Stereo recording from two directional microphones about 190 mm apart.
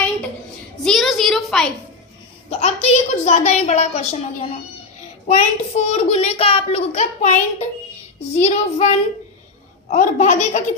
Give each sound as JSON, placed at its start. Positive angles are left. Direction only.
{"t": 0.9, "sound": "a sound", "side_deg": 0}
{"t": 2.5, "sound": "a child's voice", "side_deg": 35}
{"t": 9.9, "sound": "a child's voice", "side_deg": 40}